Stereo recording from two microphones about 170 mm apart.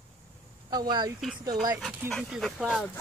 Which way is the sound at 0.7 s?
25° right (ahead or behind).